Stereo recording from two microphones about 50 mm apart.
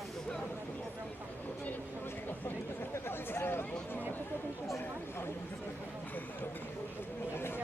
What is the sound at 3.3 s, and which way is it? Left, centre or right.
Speech, left.